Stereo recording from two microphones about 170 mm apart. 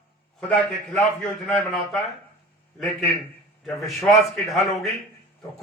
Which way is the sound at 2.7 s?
Centre (ahead or behind).